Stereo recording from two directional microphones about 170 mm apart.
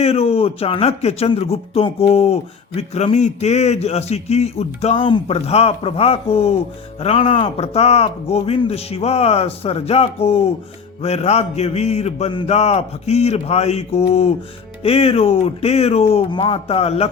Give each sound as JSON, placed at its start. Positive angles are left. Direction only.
{"t": 0.0, "sound": "speech", "side_deg": 40}